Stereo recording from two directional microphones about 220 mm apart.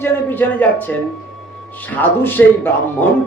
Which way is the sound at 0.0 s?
10° left (ahead or behind).